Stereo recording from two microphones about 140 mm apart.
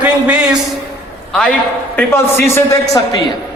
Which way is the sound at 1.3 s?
5° left (ahead or behind).